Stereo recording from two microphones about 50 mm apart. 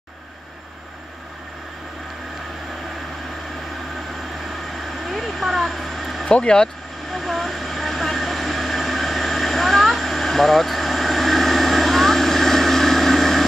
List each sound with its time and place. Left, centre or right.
5.0 s vehicle: centre
6.2 s speech: centre
7.1 s vehicle: centre